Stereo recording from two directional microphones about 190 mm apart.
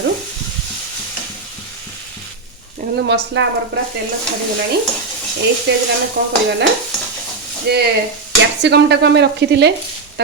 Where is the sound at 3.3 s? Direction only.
70° right (ahead or behind).